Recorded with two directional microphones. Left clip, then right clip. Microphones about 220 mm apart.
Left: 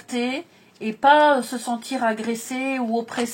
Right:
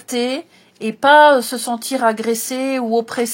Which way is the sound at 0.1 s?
55° right (ahead or behind).